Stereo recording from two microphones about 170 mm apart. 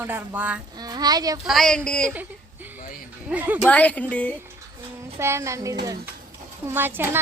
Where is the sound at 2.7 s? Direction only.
50° left (ahead or behind).